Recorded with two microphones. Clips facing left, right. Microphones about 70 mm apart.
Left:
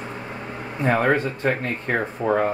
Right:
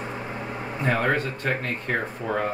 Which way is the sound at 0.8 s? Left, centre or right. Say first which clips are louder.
Left 4 dB; centre.